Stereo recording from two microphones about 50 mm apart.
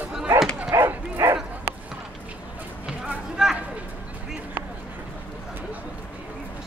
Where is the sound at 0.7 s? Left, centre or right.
Right.